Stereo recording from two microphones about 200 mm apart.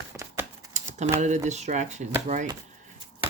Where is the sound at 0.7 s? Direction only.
35° right (ahead or behind).